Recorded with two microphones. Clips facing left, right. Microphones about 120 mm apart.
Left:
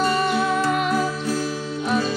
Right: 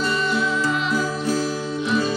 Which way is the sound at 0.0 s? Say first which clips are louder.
Left 2 dB; 55° left (ahead or behind).